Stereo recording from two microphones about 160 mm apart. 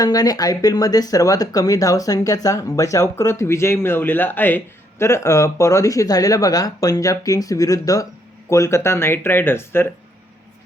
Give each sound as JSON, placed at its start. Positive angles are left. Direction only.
{"t": 0.0, "sound": "speech", "side_deg": 25}